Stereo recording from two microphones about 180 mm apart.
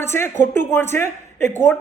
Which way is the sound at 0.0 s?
15° left (ahead or behind).